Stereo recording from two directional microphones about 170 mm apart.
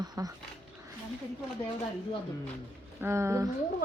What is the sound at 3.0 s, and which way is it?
Speech, 15° right (ahead or behind).